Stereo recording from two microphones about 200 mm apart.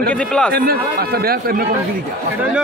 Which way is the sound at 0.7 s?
50° right (ahead or behind).